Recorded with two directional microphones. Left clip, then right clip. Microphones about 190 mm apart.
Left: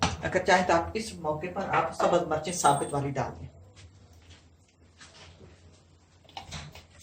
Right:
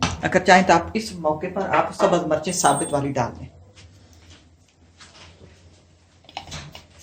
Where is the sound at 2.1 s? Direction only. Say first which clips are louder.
Right 6 dB; 55° right (ahead or behind).